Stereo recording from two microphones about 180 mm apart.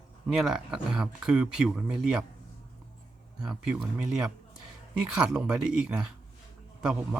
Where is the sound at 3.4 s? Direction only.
5° right (ahead or behind).